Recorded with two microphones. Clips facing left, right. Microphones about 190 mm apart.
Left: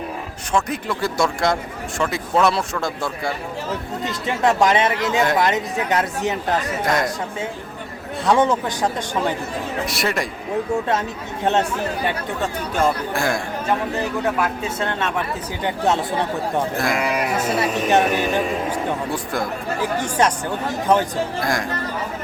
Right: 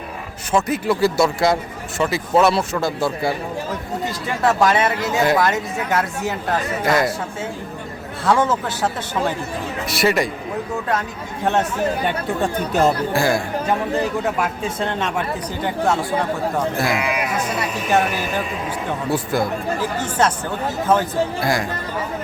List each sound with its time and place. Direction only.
0.5 s speech: 5° right (ahead or behind)
4.4 s speech: 20° left (ahead or behind)
6.8 s speech: 5° right (ahead or behind)
8.2 s speech: 20° left (ahead or behind)
9.8 s speech: centre (ahead or behind)
13.1 s speech: 5° right (ahead or behind)
15.6 s speech: 20° left (ahead or behind)
16.7 s speech: 5° right (ahead or behind)
17.3 s speech: 25° left (ahead or behind)
19.1 s speech: 5° right (ahead or behind)
20.0 s speech: 15° left (ahead or behind)
21.4 s speech: 5° right (ahead or behind)